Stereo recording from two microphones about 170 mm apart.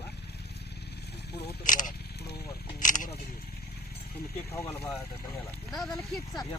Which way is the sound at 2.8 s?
50° left (ahead or behind).